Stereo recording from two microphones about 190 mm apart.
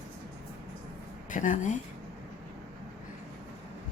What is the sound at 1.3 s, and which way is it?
Speech, 40° left (ahead or behind).